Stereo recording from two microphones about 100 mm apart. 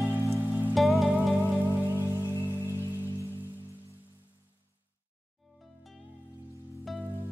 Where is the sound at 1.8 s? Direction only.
25° right (ahead or behind).